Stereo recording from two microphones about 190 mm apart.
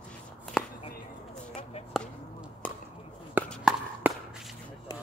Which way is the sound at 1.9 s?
Centre (ahead or behind).